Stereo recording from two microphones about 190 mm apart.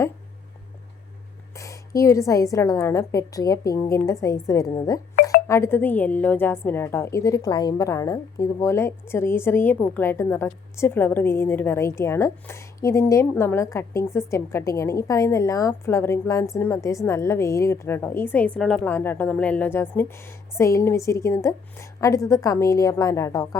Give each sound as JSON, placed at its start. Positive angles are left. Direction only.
{"t": 1.5, "sound": "a woman's voice", "side_deg": 15}